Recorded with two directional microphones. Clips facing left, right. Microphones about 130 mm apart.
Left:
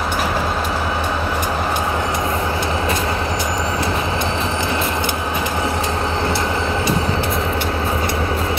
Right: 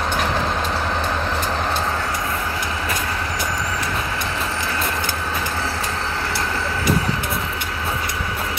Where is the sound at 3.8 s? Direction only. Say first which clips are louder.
Left 5 dB; 25° left (ahead or behind).